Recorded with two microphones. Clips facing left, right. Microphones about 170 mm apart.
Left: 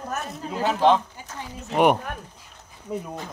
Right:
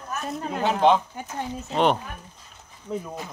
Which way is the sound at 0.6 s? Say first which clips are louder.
Even; centre (ahead or behind).